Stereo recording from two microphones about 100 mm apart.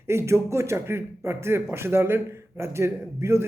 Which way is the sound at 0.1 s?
25° right (ahead or behind).